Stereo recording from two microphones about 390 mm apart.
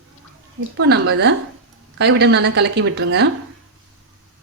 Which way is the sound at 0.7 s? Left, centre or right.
Right.